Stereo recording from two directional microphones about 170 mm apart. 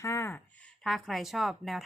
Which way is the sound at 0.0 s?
15° left (ahead or behind).